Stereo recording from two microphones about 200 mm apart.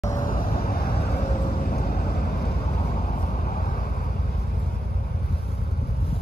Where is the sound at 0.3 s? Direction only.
45° left (ahead or behind).